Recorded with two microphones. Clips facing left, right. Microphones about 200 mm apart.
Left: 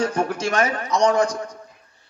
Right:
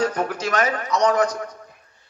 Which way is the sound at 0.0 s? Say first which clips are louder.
Left 1 dB; 30° left (ahead or behind).